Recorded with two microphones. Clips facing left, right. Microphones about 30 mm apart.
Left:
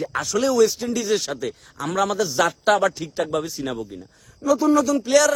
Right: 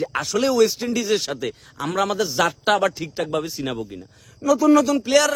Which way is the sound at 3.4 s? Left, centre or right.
Right.